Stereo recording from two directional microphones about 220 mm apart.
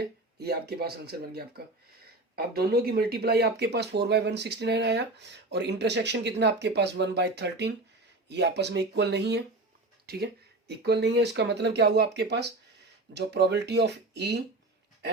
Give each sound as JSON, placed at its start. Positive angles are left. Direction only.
{"t": 0.0, "sound": "speech", "side_deg": -45}